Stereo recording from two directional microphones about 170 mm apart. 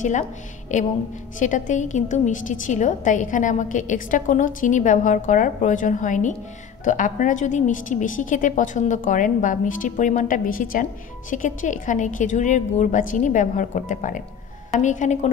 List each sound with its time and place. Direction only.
0.7 s a woman's voice: 45° left (ahead or behind)